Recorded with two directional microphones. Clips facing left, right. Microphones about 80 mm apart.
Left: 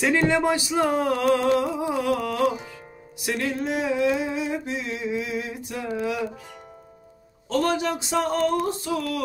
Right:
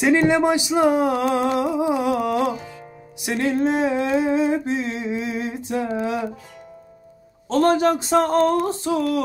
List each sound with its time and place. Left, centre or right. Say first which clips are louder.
0.0 s speech: right 4 dB; centre
3.3 s humming: right 6 dB; right
7.4 s humming: right 6 dB; right